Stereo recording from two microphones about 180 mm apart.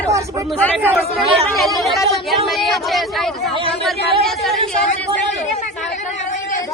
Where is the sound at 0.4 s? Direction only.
5° left (ahead or behind).